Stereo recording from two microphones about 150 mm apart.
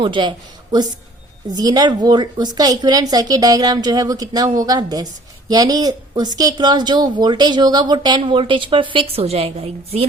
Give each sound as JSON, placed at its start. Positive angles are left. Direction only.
{"t": 0.0, "sound": "a woman's voice", "side_deg": -30}